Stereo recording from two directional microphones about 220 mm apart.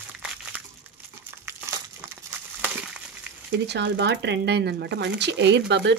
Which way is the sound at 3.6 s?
50° right (ahead or behind).